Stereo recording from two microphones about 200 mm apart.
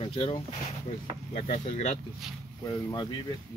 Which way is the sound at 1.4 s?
35° left (ahead or behind).